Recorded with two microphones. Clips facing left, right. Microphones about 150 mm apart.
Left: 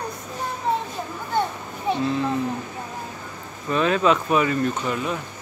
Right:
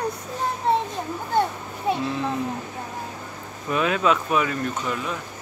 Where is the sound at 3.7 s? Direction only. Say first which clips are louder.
Left 2 dB; 5° right (ahead or behind).